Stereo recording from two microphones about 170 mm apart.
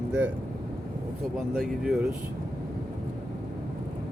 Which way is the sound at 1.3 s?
Centre (ahead or behind).